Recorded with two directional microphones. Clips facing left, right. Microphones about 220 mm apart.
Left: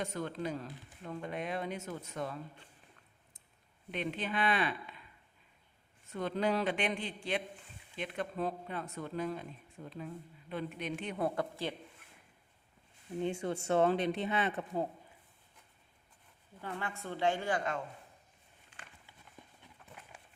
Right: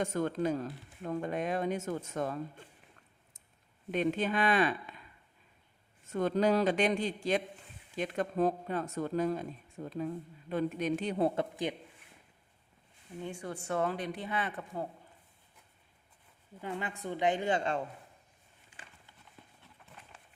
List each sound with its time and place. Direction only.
0.0 s speech: 45° right (ahead or behind)
3.9 s speech: 45° right (ahead or behind)
6.1 s a man's voice: 45° right (ahead or behind); by 11.7 s 20° right (ahead or behind)
13.2 s speech: 25° left (ahead or behind)
16.6 s a woman's voice: 15° right (ahead or behind)
19.4 s clip-clop: 15° left (ahead or behind)